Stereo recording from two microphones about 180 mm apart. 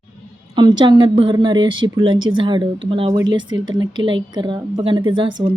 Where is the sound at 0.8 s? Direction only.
25° right (ahead or behind).